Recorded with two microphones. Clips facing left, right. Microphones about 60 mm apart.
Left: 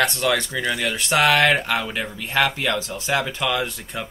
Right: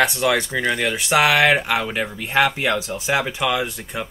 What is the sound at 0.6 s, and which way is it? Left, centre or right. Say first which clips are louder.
Speech: right 3 dB; right.